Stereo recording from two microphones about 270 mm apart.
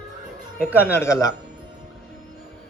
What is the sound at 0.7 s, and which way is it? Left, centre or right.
Speech, centre.